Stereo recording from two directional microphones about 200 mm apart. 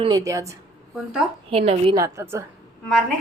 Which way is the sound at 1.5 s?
30° right (ahead or behind).